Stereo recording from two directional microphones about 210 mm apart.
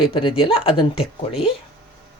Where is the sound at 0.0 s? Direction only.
25° left (ahead or behind).